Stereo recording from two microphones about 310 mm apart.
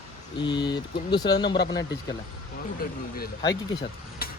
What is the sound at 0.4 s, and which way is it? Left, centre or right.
Speech, centre.